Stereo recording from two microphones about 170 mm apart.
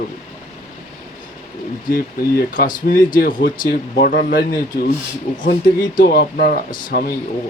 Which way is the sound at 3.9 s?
70° left (ahead or behind).